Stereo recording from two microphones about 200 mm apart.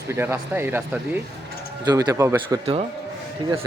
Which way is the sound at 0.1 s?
10° right (ahead or behind).